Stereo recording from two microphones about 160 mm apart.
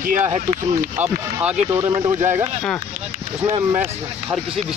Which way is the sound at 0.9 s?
10° right (ahead or behind).